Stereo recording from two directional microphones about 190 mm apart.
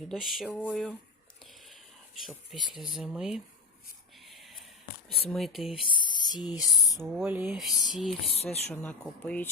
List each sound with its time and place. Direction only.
0.1 s speech: centre (ahead or behind)
4.2 s whispering: centre (ahead or behind)
5.3 s speech: centre (ahead or behind)
6.0 s speech: 25° left (ahead or behind)
6.5 s speech: 5° right (ahead or behind)